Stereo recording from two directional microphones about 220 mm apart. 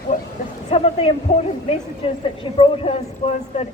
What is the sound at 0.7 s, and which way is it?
A woman's voice, 25° left (ahead or behind).